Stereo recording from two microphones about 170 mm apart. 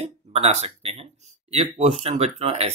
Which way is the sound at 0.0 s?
40° right (ahead or behind).